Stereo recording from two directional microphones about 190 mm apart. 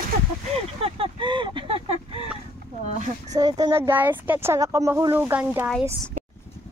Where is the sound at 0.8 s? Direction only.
30° right (ahead or behind).